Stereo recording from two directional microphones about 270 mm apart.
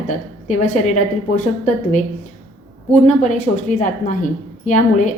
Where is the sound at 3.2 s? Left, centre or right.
Left.